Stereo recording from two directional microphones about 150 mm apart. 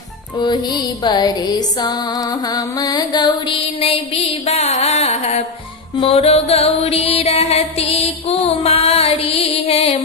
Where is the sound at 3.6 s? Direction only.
45° left (ahead or behind).